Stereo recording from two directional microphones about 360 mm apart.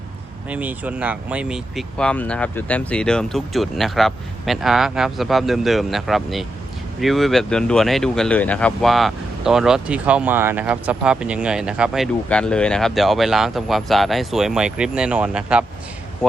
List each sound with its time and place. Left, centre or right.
0.5 s speech: centre